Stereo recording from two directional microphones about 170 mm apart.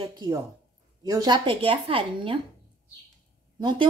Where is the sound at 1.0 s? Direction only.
20° right (ahead or behind).